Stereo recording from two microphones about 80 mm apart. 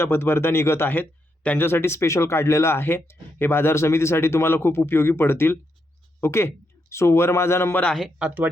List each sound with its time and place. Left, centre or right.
0.0 s speech: left
8.2 s speech: centre